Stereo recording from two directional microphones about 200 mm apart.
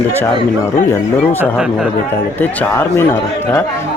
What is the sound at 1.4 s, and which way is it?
Speech, 5° right (ahead or behind).